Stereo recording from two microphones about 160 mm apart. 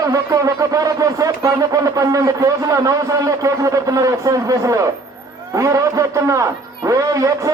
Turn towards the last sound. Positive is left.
turn(degrees=-20)  # may be behind; listen again after turning